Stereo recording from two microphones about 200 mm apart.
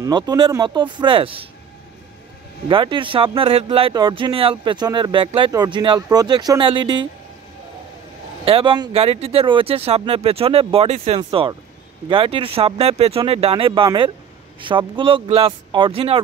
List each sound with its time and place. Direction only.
0.0 s speech: 20° right (ahead or behind)
2.7 s speech: 25° right (ahead or behind)
8.5 s speech: 25° right (ahead or behind)